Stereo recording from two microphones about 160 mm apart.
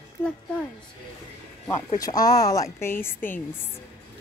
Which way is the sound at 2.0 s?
25° left (ahead or behind).